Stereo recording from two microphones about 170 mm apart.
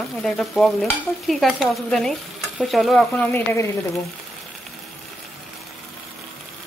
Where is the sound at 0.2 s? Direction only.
5° left (ahead or behind).